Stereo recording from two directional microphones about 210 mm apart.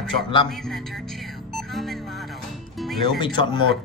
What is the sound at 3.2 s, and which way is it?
Speech, 20° left (ahead or behind).